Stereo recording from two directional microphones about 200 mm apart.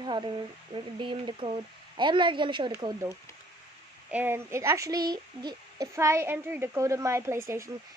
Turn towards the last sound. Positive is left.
turn(degrees=-15)  # may be behind; listen again after turning